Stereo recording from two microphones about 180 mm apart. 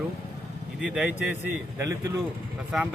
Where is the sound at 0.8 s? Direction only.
5° right (ahead or behind).